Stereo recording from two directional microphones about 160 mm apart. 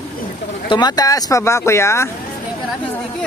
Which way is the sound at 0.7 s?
25° left (ahead or behind).